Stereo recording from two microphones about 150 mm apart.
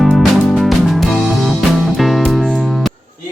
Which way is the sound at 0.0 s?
Centre (ahead or behind).